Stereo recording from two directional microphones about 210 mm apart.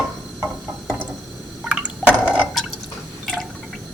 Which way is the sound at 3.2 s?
Centre (ahead or behind).